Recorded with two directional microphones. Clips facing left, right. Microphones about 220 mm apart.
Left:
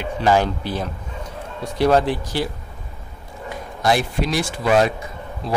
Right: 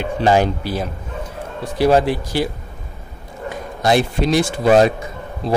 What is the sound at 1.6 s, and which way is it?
Speech, 5° right (ahead or behind).